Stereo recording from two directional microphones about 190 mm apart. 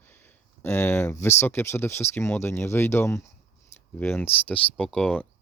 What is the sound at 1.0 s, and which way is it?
Speech, 15° left (ahead or behind).